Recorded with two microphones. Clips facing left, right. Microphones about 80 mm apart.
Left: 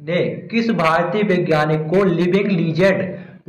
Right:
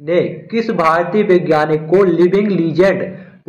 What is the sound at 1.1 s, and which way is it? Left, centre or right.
A man's voice, right.